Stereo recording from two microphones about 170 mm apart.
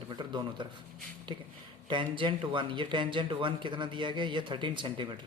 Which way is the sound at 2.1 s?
30° right (ahead or behind).